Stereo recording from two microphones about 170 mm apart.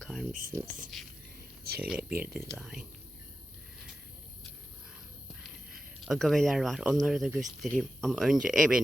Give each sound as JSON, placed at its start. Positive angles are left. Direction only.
{"t": 0.0, "sound": "a sound", "side_deg": 0}
{"t": 0.9, "sound": "speech", "side_deg": 0}
{"t": 2.1, "sound": "speech", "side_deg": -65}
{"t": 2.6, "sound": "speech", "side_deg": 0}
{"t": 5.3, "sound": "speech", "side_deg": 0}